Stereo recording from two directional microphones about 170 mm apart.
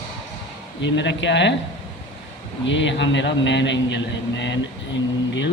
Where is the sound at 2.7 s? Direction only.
90° left.